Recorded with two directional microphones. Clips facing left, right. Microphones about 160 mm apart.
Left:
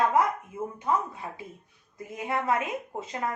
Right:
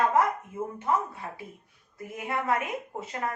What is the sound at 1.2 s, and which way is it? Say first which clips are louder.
A woman's voice: left 1 dB; 15° left (ahead or behind).